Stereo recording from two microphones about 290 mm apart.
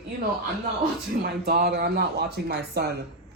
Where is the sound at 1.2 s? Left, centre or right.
Right.